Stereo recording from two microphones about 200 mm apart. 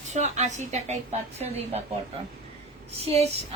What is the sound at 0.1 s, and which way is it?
A woman's voice, 35° right (ahead or behind).